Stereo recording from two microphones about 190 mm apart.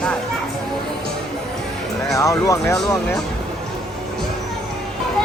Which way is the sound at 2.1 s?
15° left (ahead or behind).